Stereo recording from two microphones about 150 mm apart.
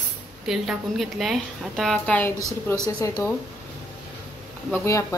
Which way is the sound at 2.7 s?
20° left (ahead or behind).